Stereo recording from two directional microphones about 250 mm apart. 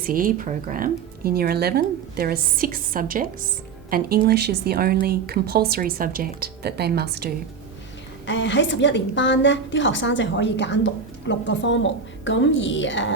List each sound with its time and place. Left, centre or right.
0.0 s speech: right
8.3 s a woman's voice: left